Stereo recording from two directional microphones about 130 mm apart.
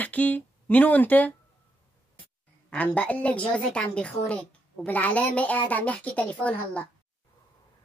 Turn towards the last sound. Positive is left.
turn(degrees=10)  # may be behind; listen again after turning